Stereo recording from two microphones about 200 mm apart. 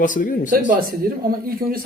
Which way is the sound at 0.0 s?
40° left (ahead or behind).